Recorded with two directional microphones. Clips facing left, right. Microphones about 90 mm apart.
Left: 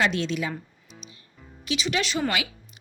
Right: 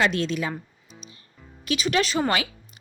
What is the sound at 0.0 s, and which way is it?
Speech, 45° right (ahead or behind).